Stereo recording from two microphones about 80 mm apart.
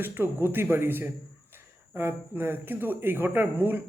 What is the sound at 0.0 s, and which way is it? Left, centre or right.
Speech, right.